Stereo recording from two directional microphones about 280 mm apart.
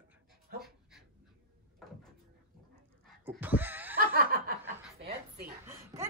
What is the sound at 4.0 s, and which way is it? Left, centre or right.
Snicker, right.